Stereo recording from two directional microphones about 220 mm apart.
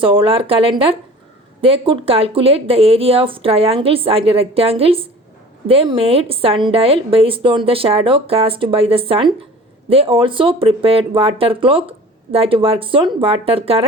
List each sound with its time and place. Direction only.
0.0 s speech: 25° right (ahead or behind)